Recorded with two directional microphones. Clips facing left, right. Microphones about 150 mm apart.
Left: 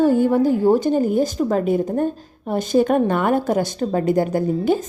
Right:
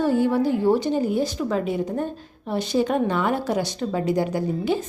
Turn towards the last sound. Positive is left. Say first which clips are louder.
# left 5 dB
turn(degrees=50)  # may be behind; listen again after turning